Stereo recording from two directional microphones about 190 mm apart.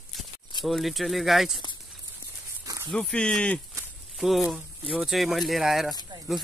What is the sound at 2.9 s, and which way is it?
Speech, 5° left (ahead or behind).